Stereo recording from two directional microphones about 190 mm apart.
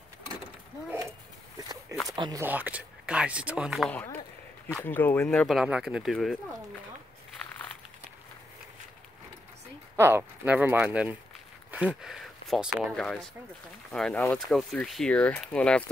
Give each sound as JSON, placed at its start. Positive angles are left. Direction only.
{"t": 0.8, "sound": "a sound", "side_deg": -15}
{"t": 2.0, "sound": "speech", "side_deg": -20}
{"t": 2.4, "sound": "speech", "side_deg": -10}
{"t": 3.9, "sound": "speech", "side_deg": 10}
{"t": 9.9, "sound": "speech", "side_deg": -10}